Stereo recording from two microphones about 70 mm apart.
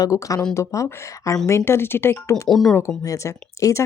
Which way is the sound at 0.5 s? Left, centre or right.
Left.